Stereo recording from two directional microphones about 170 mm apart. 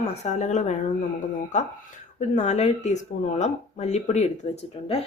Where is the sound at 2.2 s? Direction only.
40° left (ahead or behind).